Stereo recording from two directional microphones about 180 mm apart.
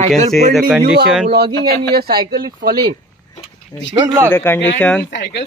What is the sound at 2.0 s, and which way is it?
Speech, 60° right (ahead or behind).